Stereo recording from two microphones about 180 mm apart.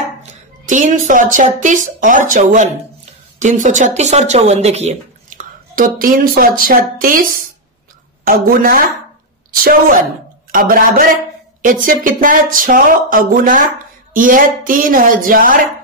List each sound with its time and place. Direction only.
0.2 s speech: 45° right (ahead or behind)